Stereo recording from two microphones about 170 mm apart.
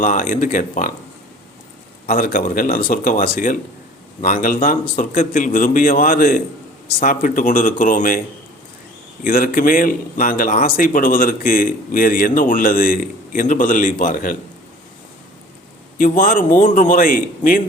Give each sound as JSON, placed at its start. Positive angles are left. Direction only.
{"t": 0.0, "sound": "speech", "side_deg": 50}
{"t": 2.0, "sound": "speech", "side_deg": 55}
{"t": 9.2, "sound": "speech", "side_deg": 55}
{"t": 16.0, "sound": "speech", "side_deg": 55}